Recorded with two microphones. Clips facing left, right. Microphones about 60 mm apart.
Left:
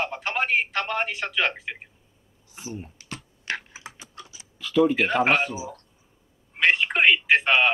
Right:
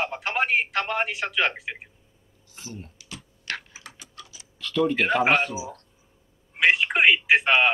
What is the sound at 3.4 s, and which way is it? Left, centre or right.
Typing, left.